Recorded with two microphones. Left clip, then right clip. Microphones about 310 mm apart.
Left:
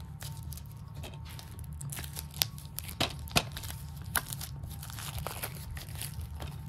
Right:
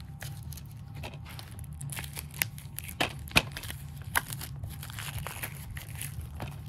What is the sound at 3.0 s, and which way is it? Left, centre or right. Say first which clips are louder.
Crumpling: right 4 dB; centre.